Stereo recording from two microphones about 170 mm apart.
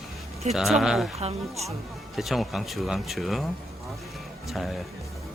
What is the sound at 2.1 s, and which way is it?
Speech, centre (ahead or behind).